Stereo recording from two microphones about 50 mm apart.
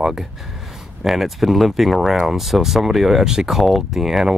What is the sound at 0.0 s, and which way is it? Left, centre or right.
Speech, centre.